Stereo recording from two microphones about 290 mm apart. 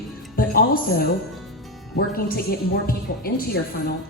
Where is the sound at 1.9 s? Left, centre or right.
Left.